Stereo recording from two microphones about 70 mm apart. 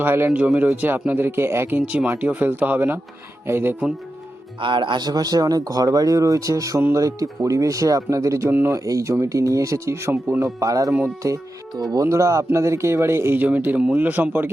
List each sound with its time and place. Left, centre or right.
0.0 s speech: right
0.3 s speech: right
4.9 s speech: right
10.4 s speech: right
13.4 s speech: right